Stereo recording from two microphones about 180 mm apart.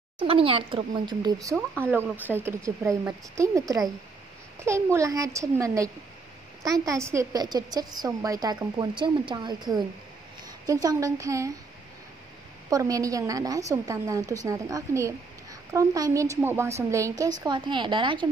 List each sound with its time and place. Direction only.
0.2 s a woman's voice: 30° right (ahead or behind)
12.6 s a woman's voice: 20° right (ahead or behind)